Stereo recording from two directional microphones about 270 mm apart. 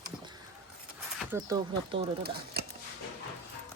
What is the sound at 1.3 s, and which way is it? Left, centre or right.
Speech, centre.